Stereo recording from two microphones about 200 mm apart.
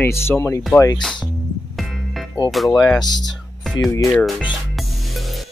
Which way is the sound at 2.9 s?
20° left (ahead or behind).